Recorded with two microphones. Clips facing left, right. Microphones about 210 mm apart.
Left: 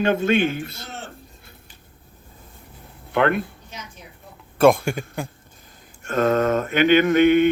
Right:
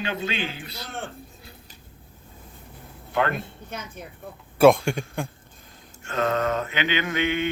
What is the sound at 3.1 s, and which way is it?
Speech, 60° left (ahead or behind).